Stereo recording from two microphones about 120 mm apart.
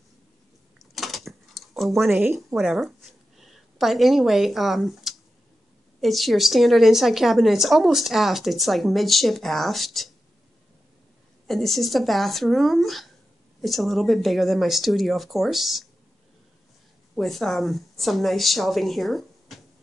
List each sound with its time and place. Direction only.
0.7 s a sound: centre (ahead or behind)
5.9 s a woman's voice: centre (ahead or behind)
11.4 s a woman's voice: centre (ahead or behind)
17.1 s a woman's voice: centre (ahead or behind)